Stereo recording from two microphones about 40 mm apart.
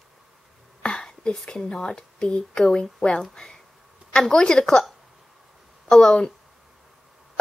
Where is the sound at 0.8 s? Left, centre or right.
Left.